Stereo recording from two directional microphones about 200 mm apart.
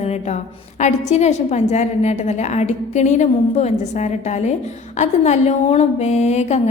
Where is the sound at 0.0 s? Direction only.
35° left (ahead or behind).